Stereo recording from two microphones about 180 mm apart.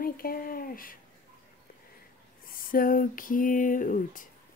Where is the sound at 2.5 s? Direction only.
50° left (ahead or behind).